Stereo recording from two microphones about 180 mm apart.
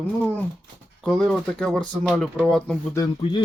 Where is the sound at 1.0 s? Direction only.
5° left (ahead or behind).